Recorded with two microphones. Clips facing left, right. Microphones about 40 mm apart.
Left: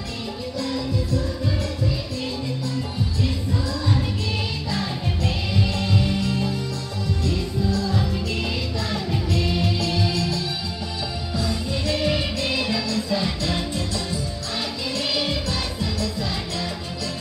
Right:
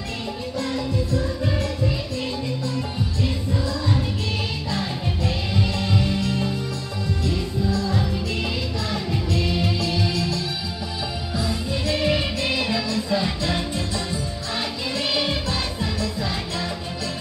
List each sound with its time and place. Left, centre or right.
0.6 s music: right
3.2 s music: centre
15.0 s music: centre